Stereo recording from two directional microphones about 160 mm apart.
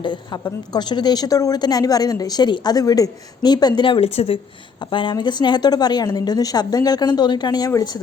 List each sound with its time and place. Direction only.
0.0 s a woman's voice: 30° left (ahead or behind)